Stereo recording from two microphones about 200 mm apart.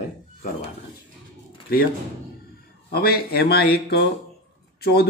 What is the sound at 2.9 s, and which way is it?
Speech, 50° left (ahead or behind).